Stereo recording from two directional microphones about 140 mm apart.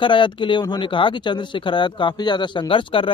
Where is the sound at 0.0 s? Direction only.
35° left (ahead or behind).